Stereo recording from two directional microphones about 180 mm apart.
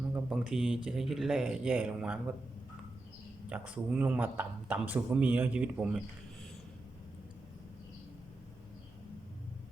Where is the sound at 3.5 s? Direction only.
5° right (ahead or behind).